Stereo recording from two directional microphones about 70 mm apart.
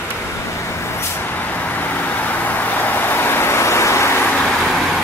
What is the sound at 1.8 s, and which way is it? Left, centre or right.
Vehicle, left.